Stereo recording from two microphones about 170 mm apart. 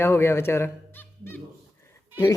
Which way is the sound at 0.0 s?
15° left (ahead or behind).